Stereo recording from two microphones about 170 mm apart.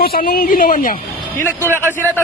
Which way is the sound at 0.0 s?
60° left (ahead or behind).